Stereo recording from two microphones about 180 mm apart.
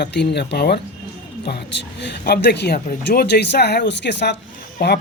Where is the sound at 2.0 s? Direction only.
70° left (ahead or behind).